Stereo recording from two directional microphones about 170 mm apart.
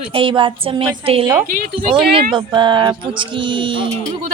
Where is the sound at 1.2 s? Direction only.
15° right (ahead or behind).